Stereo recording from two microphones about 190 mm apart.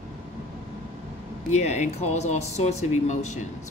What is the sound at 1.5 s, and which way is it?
Speech, 35° left (ahead or behind).